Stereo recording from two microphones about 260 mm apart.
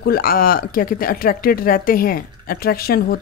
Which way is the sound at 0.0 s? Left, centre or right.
Left.